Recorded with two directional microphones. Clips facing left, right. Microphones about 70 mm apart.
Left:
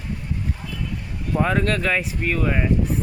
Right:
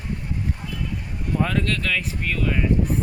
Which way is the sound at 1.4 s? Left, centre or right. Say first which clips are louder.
Left 4 dB; left.